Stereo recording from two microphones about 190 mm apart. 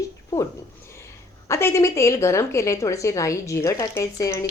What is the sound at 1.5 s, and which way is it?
A woman's voice, 15° left (ahead or behind).